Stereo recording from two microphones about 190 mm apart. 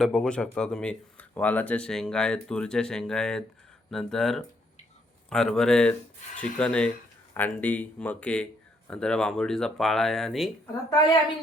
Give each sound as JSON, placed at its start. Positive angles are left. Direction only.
{"t": 0.0, "sound": "speech", "side_deg": 0}
{"t": 10.8, "sound": "a woman's voice", "side_deg": 20}